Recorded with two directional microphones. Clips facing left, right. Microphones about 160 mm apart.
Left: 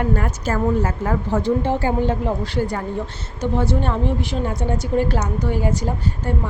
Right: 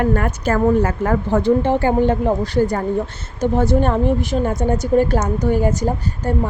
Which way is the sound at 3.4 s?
45° right (ahead or behind).